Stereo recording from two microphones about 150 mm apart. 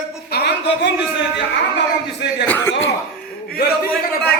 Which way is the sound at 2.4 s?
10° left (ahead or behind).